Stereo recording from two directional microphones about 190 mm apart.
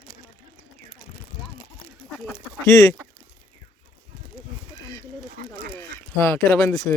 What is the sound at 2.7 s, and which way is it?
Speech, 15° left (ahead or behind).